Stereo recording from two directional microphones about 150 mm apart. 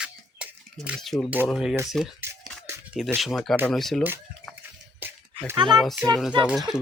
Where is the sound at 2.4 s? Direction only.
5° left (ahead or behind).